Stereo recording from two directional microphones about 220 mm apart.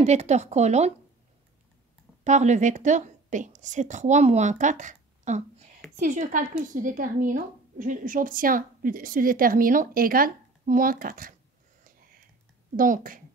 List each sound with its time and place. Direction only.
0.0 s speech: 30° right (ahead or behind)
2.2 s a woman's voice: 30° right (ahead or behind)
12.7 s speech: 40° right (ahead or behind)